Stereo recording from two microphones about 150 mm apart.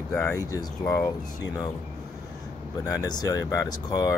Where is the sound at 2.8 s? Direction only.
25° left (ahead or behind).